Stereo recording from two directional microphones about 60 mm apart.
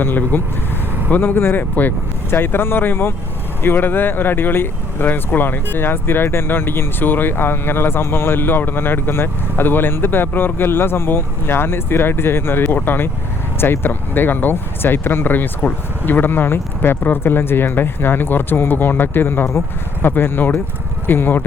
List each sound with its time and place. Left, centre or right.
0.0 s speech: left